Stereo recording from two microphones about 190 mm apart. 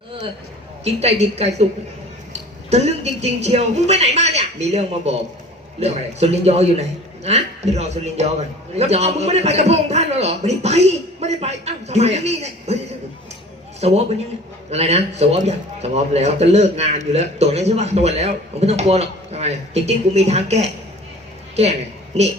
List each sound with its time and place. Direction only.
0.9 s a man's voice: 35° right (ahead or behind)
13.8 s a man's voice: 35° right (ahead or behind)